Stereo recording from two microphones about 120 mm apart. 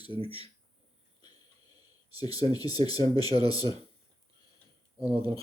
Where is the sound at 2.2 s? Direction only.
35° left (ahead or behind).